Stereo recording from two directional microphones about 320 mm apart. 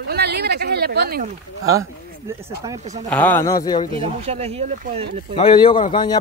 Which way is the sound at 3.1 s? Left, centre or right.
Centre.